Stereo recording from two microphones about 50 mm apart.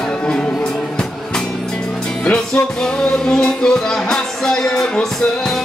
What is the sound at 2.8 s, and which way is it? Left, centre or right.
Music, centre.